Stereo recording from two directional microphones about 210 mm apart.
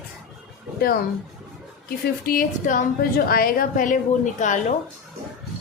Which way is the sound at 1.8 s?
45° left (ahead or behind).